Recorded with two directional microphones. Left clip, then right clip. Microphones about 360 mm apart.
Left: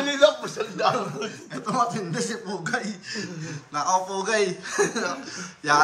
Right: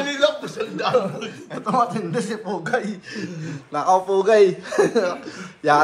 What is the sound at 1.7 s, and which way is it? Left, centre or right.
A man's voice, centre.